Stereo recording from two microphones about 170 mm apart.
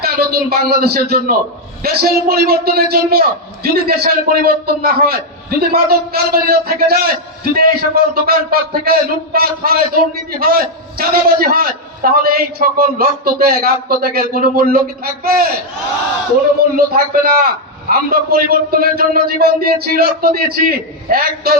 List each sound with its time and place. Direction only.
0.0 s a man's voice: 65° right (ahead or behind)
16.7 s a man's voice: 65° right (ahead or behind)